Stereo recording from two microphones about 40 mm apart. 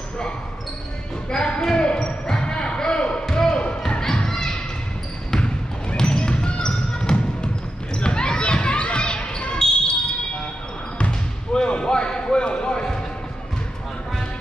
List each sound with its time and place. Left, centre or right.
1.3 s basketball bounce: centre
4.0 s thump: centre
5.3 s basketball bounce: left
11.1 s basketball bounce: left